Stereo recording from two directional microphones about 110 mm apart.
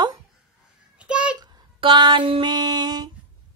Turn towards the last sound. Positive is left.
turn(degrees=-35)  # may be behind; listen again after turning